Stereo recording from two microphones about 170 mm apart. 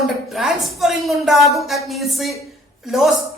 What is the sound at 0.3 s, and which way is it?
A woman's voice, centre (ahead or behind).